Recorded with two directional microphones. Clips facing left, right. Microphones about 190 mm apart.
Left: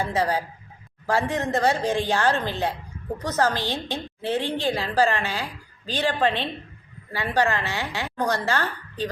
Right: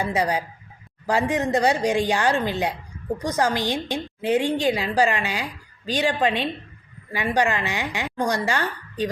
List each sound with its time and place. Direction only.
0.0 s a woman's voice: 15° right (ahead or behind)